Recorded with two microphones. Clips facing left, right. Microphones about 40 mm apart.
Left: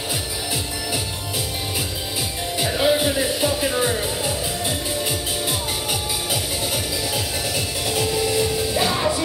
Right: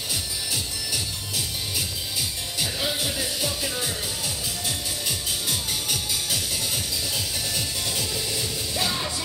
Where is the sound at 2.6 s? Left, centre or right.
Left.